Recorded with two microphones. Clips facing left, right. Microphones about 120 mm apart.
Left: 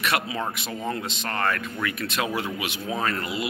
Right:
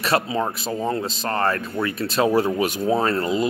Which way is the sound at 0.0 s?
35° right (ahead or behind).